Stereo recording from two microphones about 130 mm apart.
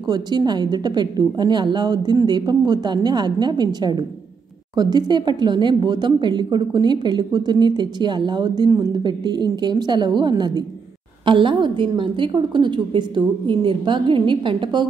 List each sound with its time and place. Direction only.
0.0 s a woman's voice: 30° right (ahead or behind)